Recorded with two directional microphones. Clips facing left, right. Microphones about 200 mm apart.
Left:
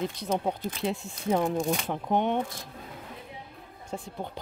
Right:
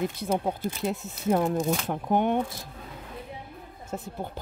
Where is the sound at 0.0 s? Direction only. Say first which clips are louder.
Right 2 dB; 5° right (ahead or behind).